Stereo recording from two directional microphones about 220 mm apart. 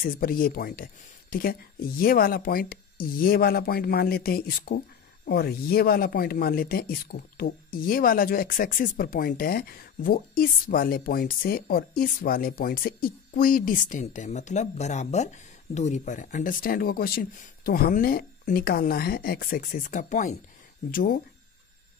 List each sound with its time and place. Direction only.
0.0 s speech: 40° left (ahead or behind)